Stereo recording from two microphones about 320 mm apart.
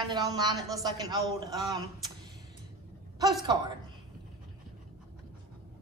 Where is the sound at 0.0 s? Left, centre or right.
Centre.